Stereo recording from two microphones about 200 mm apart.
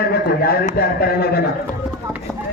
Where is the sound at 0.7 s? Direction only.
50° left (ahead or behind).